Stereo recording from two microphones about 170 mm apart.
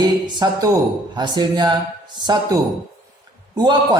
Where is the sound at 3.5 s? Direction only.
25° right (ahead or behind).